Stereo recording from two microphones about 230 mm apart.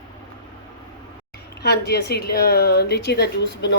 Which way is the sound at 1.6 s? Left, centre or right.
Left.